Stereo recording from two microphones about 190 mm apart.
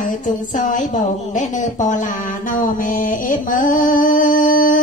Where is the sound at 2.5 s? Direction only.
45° left (ahead or behind).